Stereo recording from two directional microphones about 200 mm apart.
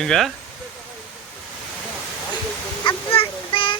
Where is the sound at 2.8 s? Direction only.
25° left (ahead or behind).